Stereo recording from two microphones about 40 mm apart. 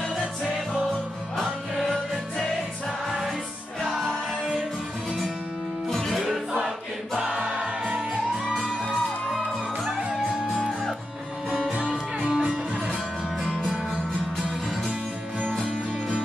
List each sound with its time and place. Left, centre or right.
3.1 s music: centre
3.8 s music: centre
5.9 s music: centre
7.2 s music: right
10.6 s music: centre
11.9 s music: centre